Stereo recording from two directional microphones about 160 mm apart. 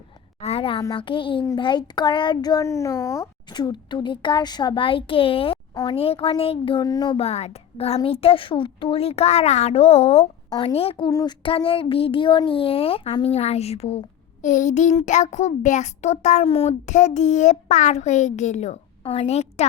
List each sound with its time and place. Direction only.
0.3 s a sound: 40° left (ahead or behind)
0.8 s a child's voice: 30° left (ahead or behind)
11.1 s a child's voice: 25° left (ahead or behind)
14.4 s a child's voice: 50° left (ahead or behind)